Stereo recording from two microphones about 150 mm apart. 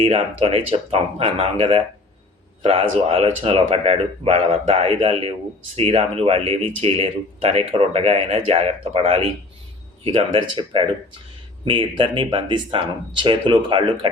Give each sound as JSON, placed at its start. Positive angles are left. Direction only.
{"t": 0.0, "sound": "speech", "side_deg": -45}